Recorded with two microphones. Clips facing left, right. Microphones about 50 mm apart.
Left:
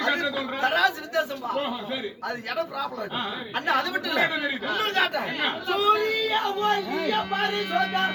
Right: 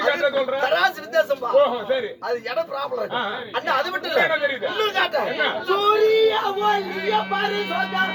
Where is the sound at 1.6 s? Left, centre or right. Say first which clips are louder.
Right 14 dB; centre.